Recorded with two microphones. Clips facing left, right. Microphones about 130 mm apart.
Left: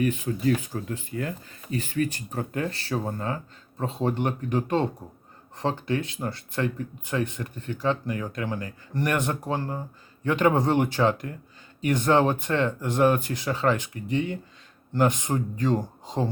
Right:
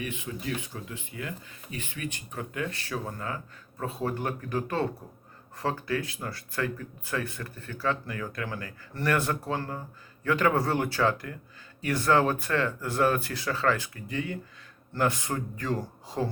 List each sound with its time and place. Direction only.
0.0 s speech: 40° left (ahead or behind); by 16.3 s 20° left (ahead or behind)